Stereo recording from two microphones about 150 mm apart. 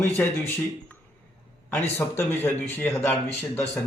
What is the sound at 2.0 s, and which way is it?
Speech, 15° left (ahead or behind).